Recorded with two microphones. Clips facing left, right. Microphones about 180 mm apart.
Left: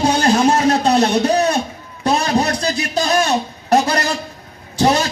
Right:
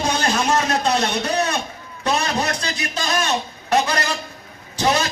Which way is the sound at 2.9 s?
40° left (ahead or behind).